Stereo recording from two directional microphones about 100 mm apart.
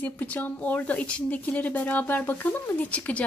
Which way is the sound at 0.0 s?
15° left (ahead or behind).